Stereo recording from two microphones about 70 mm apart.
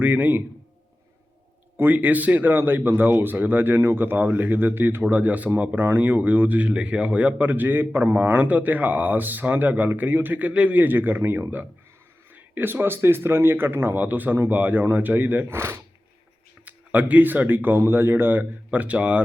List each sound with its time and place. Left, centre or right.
0.0 s speech: right
1.7 s speech: right
15.5 s speech: right
16.6 s speech: right